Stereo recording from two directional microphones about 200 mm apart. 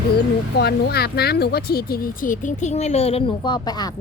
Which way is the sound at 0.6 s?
50° left (ahead or behind).